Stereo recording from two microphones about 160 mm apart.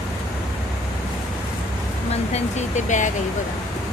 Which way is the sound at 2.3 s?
45° left (ahead or behind).